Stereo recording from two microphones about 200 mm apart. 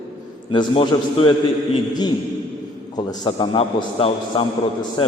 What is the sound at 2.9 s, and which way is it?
A man's voice, 20° left (ahead or behind).